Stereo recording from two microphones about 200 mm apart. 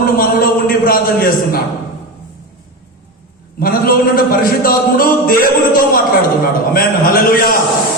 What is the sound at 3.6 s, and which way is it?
Speech, 45° left (ahead or behind).